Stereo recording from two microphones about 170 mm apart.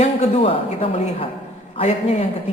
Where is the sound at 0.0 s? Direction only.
35° left (ahead or behind).